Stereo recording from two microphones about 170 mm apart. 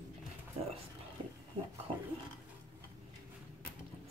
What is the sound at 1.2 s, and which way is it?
Pig, 25° right (ahead or behind).